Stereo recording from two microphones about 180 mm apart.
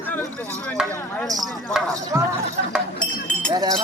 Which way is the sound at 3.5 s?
20° right (ahead or behind).